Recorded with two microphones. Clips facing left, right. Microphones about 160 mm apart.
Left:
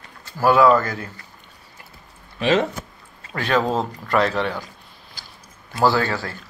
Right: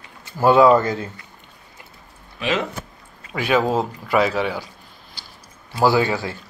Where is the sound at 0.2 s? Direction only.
20° right (ahead or behind).